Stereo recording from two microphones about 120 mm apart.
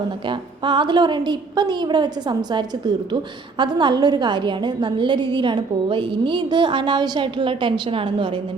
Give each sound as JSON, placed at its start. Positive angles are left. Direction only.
{"t": 0.3, "sound": "a woman's voice", "side_deg": -40}